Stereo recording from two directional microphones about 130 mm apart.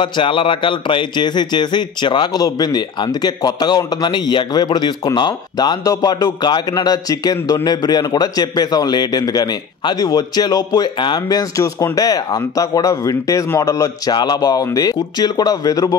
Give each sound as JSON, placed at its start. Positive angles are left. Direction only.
{"t": 0.0, "sound": "a man's voice", "side_deg": 40}